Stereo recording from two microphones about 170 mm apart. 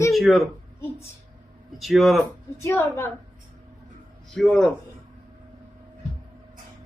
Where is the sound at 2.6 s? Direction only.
15° left (ahead or behind).